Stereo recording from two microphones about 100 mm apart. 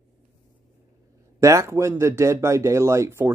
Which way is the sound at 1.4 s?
30° right (ahead or behind).